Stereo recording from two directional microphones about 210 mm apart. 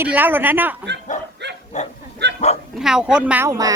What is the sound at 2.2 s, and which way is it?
Dog, 55° right (ahead or behind).